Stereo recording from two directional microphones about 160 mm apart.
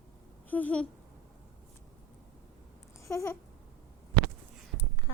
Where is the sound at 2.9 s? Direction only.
20° left (ahead or behind).